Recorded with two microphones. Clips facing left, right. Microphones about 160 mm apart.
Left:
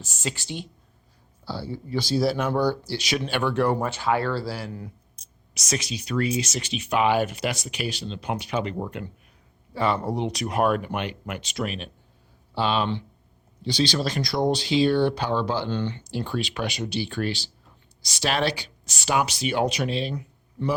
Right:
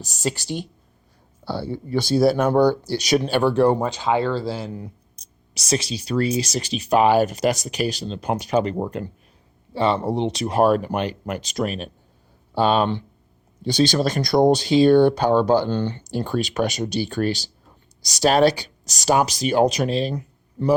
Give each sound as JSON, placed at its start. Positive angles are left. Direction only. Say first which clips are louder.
{"t": 0.0, "sound": "speech", "louder": "right 6 dB", "side_deg": -40}
{"t": 1.5, "sound": "speech", "louder": "right 5 dB", "side_deg": -60}
{"t": 3.8, "sound": "speech", "louder": "right 3 dB", "side_deg": -20}
{"t": 5.1, "sound": "speech", "louder": "right 3 dB", "side_deg": -35}
{"t": 9.7, "sound": "speech", "louder": "right 4 dB", "side_deg": -25}